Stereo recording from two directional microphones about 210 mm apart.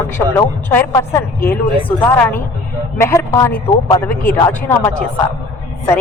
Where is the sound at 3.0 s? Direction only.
10° left (ahead or behind).